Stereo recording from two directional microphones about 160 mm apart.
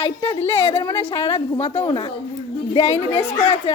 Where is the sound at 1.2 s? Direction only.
40° left (ahead or behind).